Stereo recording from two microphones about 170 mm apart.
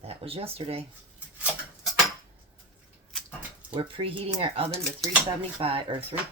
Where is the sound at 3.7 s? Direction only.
30° right (ahead or behind).